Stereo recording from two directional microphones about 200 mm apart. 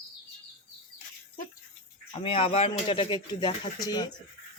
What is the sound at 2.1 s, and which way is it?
Speech, 25° left (ahead or behind).